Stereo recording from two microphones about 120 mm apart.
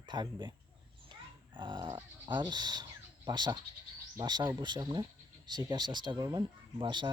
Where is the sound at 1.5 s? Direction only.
40° right (ahead or behind).